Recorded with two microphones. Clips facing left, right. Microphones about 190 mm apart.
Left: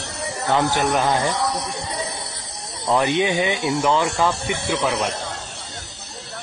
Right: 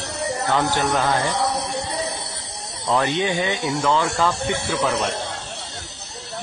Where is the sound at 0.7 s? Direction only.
20° left (ahead or behind).